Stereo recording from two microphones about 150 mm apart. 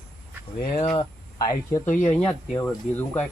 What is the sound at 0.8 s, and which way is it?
Speech, 45° left (ahead or behind).